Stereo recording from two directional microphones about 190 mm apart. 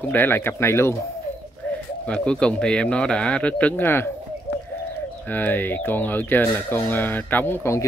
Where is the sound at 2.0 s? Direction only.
5° left (ahead or behind).